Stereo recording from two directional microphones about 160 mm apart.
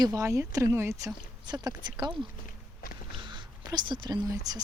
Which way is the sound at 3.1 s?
30° right (ahead or behind).